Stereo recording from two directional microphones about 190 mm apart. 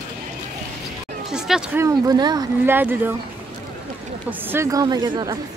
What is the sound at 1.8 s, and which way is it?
Speech, 20° right (ahead or behind).